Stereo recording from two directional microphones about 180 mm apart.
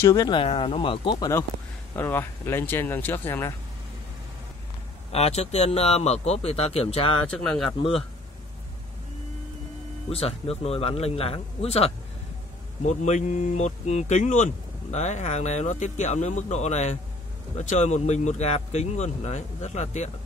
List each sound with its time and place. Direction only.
0.0 s speech: 20° left (ahead or behind)
2.0 s speech: 10° left (ahead or behind)
5.1 s speech: 35° left (ahead or behind)
7.2 s speech: 5° left (ahead or behind)
10.0 s speech: 35° left (ahead or behind)